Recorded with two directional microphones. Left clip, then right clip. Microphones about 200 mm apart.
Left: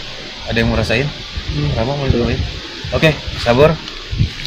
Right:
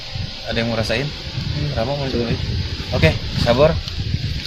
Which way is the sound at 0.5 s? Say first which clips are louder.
Left 5 dB; 20° right (ahead or behind).